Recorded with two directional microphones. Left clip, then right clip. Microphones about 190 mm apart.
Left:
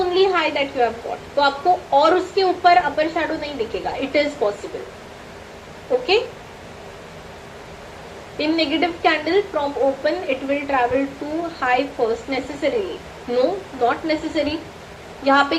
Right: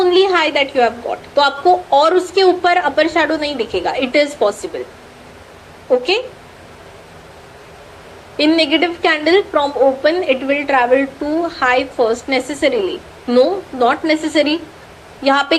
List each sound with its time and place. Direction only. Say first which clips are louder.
0.0 s a sound: right 5 dB; 45° right (ahead or behind)
1.4 s a woman's voice: right 5 dB; 45° right (ahead or behind)
8.4 s a woman's voice: right 6 dB; 45° right (ahead or behind)